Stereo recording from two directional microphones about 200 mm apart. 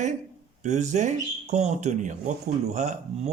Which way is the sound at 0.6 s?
35° right (ahead or behind).